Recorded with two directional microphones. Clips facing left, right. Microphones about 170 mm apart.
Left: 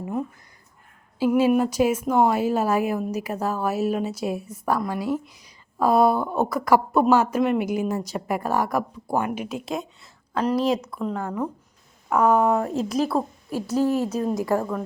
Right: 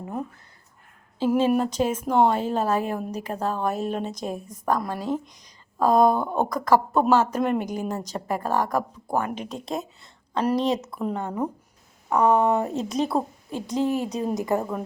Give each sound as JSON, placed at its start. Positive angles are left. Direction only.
{"t": 1.4, "sound": "a woman's voice", "side_deg": 10}
{"t": 12.0, "sound": "a woman's voice", "side_deg": 0}
{"t": 13.7, "sound": "a woman's voice", "side_deg": -15}
{"t": 14.1, "sound": "speech", "side_deg": 0}